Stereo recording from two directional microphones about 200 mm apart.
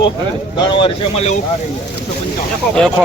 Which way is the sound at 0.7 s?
30° left (ahead or behind).